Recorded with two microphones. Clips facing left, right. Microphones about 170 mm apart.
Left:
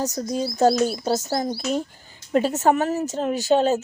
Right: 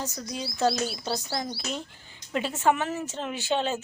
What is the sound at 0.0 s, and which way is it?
Speech, 40° left (ahead or behind).